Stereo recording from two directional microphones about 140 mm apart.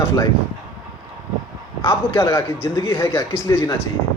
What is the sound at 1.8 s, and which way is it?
Speech, 20° left (ahead or behind).